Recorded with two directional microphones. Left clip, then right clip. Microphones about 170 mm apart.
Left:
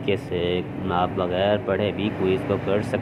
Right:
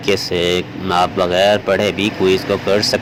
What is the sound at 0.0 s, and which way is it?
Speech, 35° right (ahead or behind).